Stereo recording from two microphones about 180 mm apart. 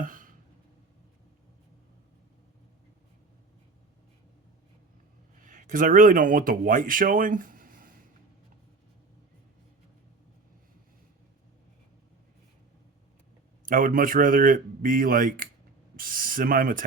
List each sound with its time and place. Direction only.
0.0 s a sound: 50° right (ahead or behind)
5.4 s speech: 45° right (ahead or behind)
13.7 s speech: 50° right (ahead or behind)